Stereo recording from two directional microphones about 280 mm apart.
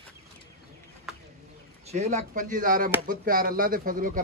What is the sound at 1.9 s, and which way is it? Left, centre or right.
Speech, right.